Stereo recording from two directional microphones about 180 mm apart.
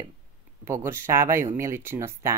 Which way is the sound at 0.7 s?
15° right (ahead or behind).